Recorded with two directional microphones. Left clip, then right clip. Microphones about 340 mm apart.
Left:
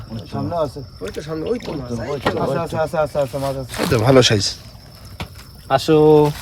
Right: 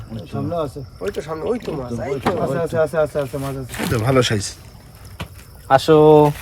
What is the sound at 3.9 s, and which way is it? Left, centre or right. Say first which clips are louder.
Speech: left 5 dB; left.